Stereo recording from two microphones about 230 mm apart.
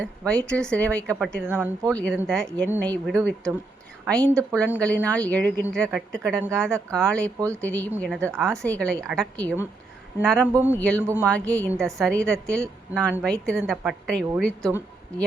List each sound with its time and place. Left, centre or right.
0.0 s a woman's voice: centre
1.5 s speech: centre
2.1 s a woman's voice: centre
7.3 s speech: centre
7.6 s a woman's voice: centre
10.5 s speech: centre
10.8 s a woman's voice: centre